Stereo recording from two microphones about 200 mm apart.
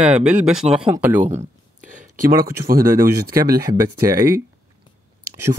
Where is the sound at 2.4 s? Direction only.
45° right (ahead or behind).